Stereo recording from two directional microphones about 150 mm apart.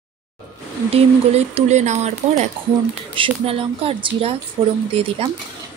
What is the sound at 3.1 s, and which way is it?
Speech, 35° right (ahead or behind).